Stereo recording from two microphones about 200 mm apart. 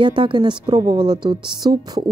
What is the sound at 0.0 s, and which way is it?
A woman's voice, 25° right (ahead or behind).